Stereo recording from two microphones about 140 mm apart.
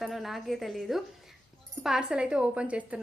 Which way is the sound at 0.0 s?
Centre (ahead or behind).